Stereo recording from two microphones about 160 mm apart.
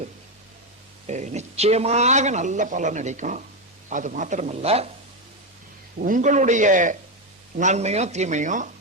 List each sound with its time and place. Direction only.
1.0 s speech: 45° right (ahead or behind)
6.1 s speech: 50° right (ahead or behind)